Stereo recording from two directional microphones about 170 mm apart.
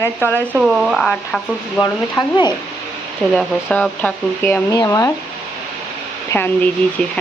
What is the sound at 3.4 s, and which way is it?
Speech, 5° left (ahead or behind).